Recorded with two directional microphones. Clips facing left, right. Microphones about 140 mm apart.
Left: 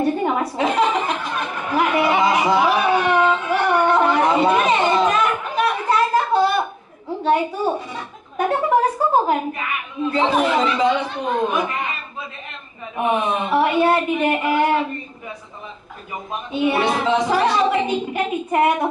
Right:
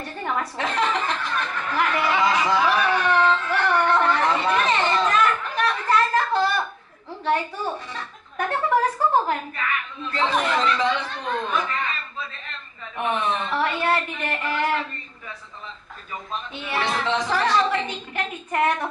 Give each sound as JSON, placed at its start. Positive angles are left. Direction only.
{"t": 0.0, "sound": "chuckle", "side_deg": 20}
{"t": 0.6, "sound": "a sound", "side_deg": 15}
{"t": 10.3, "sound": "a woman's voice", "side_deg": 10}